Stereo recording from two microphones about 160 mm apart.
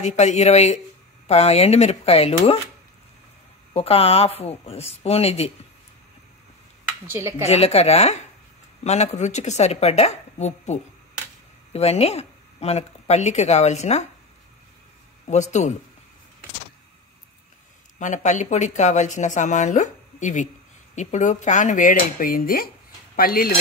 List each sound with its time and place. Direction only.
0.0 s a woman's voice: 45° left (ahead or behind)
3.7 s a woman's voice: 40° left (ahead or behind)
7.1 s a woman's voice: 15° right (ahead or behind)
7.4 s a woman's voice: 40° left (ahead or behind)
15.2 s speech: 45° left (ahead or behind)
17.9 s speech: 50° left (ahead or behind); by 23.5 s 65° left (ahead or behind)